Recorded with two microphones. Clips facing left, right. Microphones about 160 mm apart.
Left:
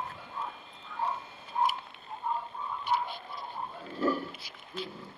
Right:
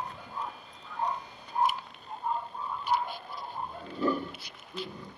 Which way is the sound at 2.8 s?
Centre (ahead or behind).